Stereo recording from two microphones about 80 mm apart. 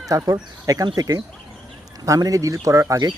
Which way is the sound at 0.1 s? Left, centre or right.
Right.